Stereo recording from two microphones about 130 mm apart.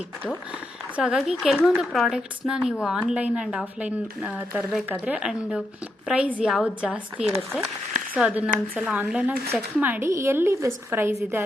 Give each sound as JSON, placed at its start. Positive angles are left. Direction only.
{"t": 0.9, "sound": "speech", "side_deg": -5}